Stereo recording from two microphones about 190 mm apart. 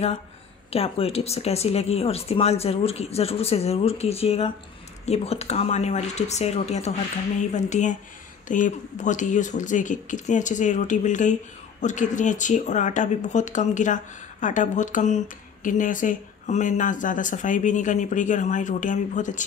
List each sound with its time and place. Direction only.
0.7 s speech: 30° left (ahead or behind)